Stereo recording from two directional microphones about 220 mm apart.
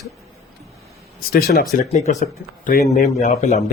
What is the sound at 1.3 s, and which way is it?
Speech, 45° left (ahead or behind).